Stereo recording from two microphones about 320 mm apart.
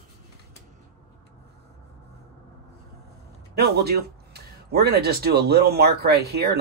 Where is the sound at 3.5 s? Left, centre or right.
Right.